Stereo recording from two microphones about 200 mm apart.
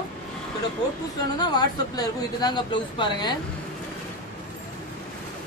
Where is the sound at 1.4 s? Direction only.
20° left (ahead or behind).